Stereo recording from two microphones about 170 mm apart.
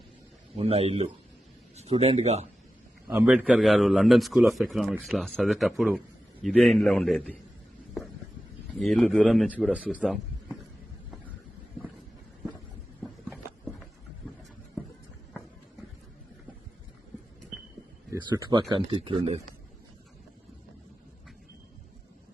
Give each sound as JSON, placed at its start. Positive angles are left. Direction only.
{"t": 0.5, "sound": "a man's voice", "side_deg": -35}
{"t": 3.1, "sound": "a man's voice", "side_deg": -10}
{"t": 8.8, "sound": "a man's voice", "side_deg": 0}
{"t": 13.0, "sound": "a sound", "side_deg": 0}
{"t": 18.7, "sound": "speech", "side_deg": -30}